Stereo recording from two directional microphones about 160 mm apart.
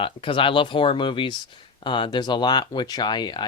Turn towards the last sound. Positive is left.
turn(degrees=25)  # may be behind; listen again after turning